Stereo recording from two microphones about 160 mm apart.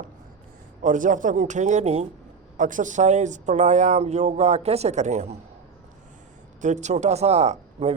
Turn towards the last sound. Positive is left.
turn(degrees=-45)  # may be behind; listen again after turning